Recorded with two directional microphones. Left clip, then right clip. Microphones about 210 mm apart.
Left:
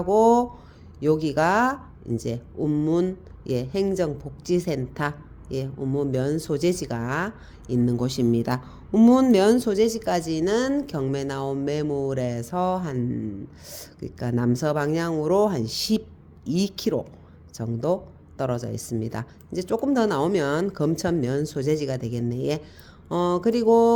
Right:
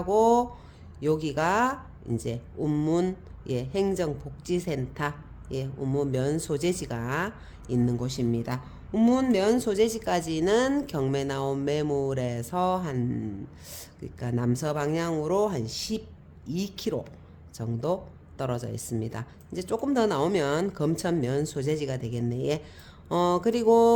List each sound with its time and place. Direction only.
0.0 s speech: 15° left (ahead or behind)
2.6 s speech: 5° left (ahead or behind)
13.7 s speech: 15° left (ahead or behind)